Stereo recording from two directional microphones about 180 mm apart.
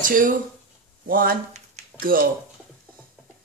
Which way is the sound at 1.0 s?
55° right (ahead or behind).